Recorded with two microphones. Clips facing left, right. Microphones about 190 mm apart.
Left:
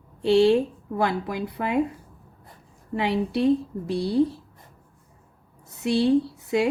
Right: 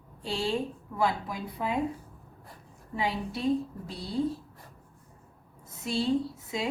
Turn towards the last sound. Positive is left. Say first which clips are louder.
# left 9 dB
turn(degrees=70)  # may be behind; listen again after turning